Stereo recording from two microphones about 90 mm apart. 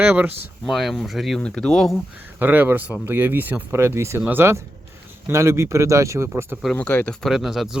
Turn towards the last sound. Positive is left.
turn(degrees=-5)  # may be behind; listen again after turning